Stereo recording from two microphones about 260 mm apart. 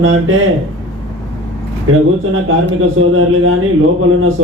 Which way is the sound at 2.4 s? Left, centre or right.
Right.